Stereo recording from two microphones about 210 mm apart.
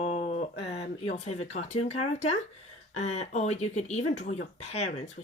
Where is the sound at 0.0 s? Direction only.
35° left (ahead or behind).